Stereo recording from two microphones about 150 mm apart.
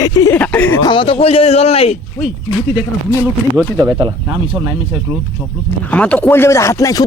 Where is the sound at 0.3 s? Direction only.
10° left (ahead or behind).